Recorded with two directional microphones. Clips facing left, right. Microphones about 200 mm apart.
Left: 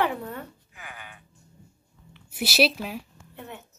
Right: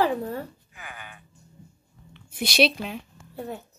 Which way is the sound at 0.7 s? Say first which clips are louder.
Right 1 dB; 45° right (ahead or behind).